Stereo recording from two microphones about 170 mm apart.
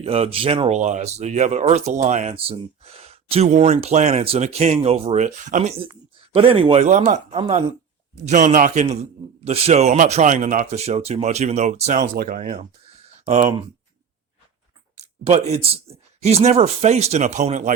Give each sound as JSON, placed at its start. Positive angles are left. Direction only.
{"t": 0.0, "sound": "speech", "side_deg": -35}
{"t": 6.8, "sound": "speech", "side_deg": -45}
{"t": 12.1, "sound": "speech", "side_deg": -60}
{"t": 13.2, "sound": "speech", "side_deg": -35}
{"t": 14.9, "sound": "speech", "side_deg": -40}